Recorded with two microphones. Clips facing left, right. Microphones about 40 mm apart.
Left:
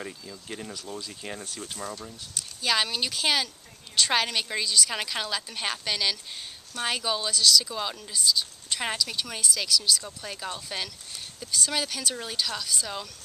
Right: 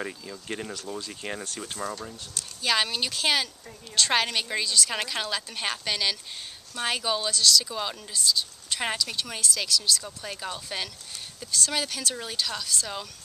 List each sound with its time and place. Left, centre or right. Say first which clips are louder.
0.0 s speech: right 3 dB; centre
2.3 s speech: right 1 dB; centre